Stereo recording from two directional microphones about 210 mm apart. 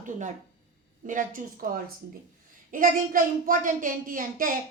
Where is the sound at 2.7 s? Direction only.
40° right (ahead or behind).